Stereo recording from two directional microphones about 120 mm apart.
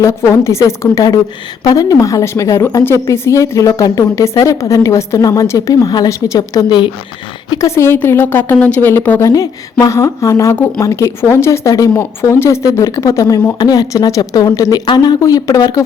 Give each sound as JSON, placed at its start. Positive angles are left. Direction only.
{"t": 0.0, "sound": "a woman's voice", "side_deg": 25}
{"t": 7.5, "sound": "a woman's voice", "side_deg": 25}